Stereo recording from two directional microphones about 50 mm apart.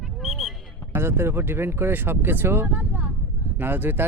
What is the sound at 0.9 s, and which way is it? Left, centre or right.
A man's voice, right.